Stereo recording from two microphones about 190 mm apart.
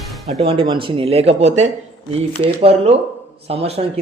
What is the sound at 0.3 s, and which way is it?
Speech, 30° right (ahead or behind).